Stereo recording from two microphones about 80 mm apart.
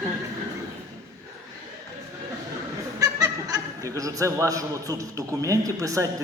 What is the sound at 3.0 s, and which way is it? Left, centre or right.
A man's voice, right.